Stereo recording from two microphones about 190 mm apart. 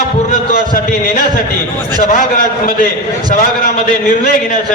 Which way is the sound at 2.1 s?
45° left (ahead or behind).